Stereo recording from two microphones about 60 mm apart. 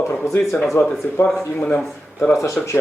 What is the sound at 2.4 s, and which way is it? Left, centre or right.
Speech, left.